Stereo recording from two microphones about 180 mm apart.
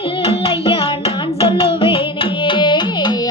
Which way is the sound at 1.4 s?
30° left (ahead or behind).